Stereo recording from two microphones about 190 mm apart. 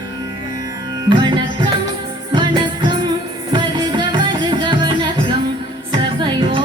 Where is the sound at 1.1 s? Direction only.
25° right (ahead or behind).